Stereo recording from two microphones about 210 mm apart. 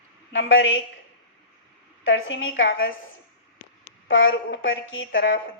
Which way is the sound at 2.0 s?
65° left (ahead or behind).